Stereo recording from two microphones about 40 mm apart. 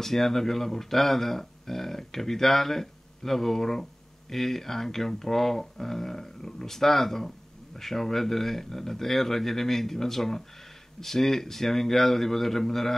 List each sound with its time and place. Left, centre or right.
0.0 s speech: centre